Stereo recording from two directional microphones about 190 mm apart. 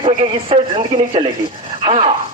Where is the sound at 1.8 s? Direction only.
30° right (ahead or behind).